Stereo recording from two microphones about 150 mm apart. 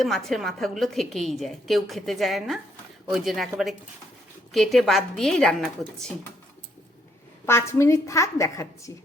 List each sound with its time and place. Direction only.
0.0 s a woman's voice: centre (ahead or behind)
7.4 s a woman's voice: 15° left (ahead or behind)